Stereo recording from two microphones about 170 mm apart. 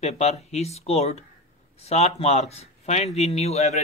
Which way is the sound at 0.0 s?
40° left (ahead or behind).